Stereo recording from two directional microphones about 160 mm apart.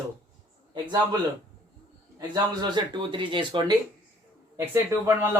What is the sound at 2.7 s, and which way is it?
Speech, 30° right (ahead or behind).